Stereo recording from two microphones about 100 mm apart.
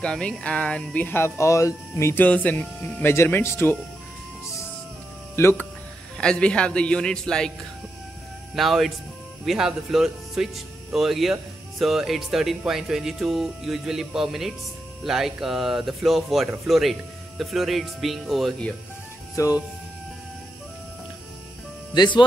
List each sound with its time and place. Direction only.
0.0 s speech: 10° left (ahead or behind); by 2.2 s 30° left (ahead or behind)
2.2 s speech: 15° left (ahead or behind)
5.3 s speech: 25° left (ahead or behind)
6.1 s speech: 10° left (ahead or behind)
8.5 s speech: centre (ahead or behind)
19.4 s speech: 35° left (ahead or behind)
21.9 s speech: 50° left (ahead or behind)